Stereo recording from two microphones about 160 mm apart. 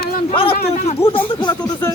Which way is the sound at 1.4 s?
25° left (ahead or behind).